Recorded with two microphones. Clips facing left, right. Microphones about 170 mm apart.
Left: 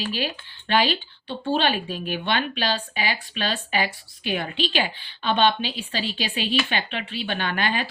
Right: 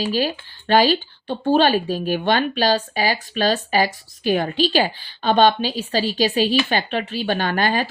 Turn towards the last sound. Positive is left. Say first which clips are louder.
# right 5 dB
turn(degrees=-40)  # may be behind; listen again after turning